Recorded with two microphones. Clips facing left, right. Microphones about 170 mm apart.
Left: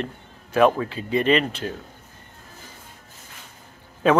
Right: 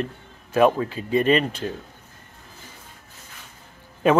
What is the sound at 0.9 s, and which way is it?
Speech, 40° right (ahead or behind).